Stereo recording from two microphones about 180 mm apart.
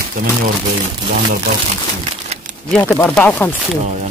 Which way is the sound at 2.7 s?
10° left (ahead or behind).